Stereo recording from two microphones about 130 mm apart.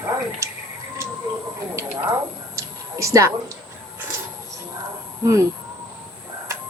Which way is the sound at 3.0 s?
25° right (ahead or behind).